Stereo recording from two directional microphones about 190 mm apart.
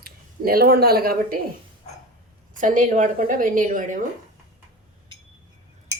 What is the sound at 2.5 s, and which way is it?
A woman's voice, 45° right (ahead or behind).